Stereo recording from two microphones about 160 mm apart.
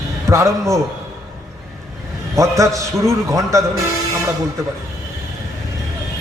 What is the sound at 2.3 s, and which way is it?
A man's voice, 20° right (ahead or behind).